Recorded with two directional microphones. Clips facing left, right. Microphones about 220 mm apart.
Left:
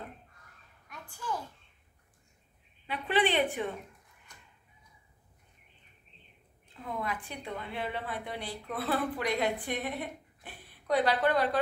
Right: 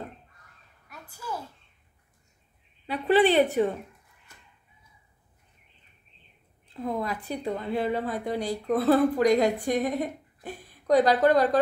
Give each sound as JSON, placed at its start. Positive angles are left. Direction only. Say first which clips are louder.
{"t": 0.8, "sound": "a sound", "louder": "right 1 dB", "side_deg": -10}
{"t": 2.9, "sound": "a woman's voice", "louder": "right 8 dB", "side_deg": -40}
{"t": 6.7, "sound": "a woman's voice", "louder": "right 7 dB", "side_deg": -35}